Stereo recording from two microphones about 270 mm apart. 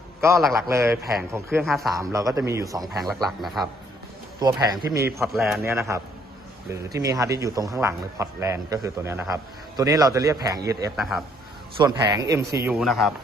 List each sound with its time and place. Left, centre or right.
0.2 s a man's voice: centre
2.0 s a man's voice: centre
2.8 s a man's voice: centre
4.4 s speech: centre
5.2 s a man's voice: centre
10.9 s a man's voice: centre
11.8 s a man's voice: centre
12.6 s a man's voice: centre